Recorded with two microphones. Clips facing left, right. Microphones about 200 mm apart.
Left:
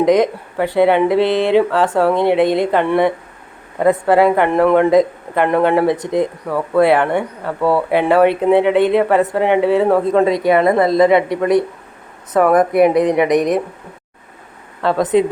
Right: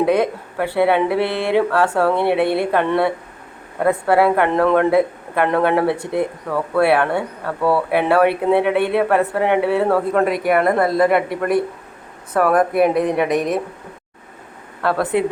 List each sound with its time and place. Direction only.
0.0 s speech: 15° left (ahead or behind)
14.8 s speech: 20° left (ahead or behind)